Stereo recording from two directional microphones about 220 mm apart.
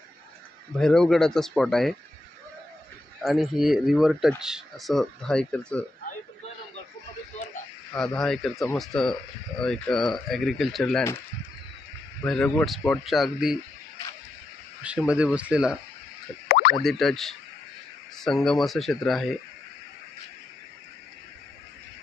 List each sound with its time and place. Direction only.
0.7 s speech: centre (ahead or behind)
3.2 s speech: centre (ahead or behind)
7.9 s speech: 5° left (ahead or behind)
12.2 s speech: 5° left (ahead or behind)
14.8 s speech: 5° right (ahead or behind)
16.4 s plop: 40° left (ahead or behind)
16.8 s speech: centre (ahead or behind)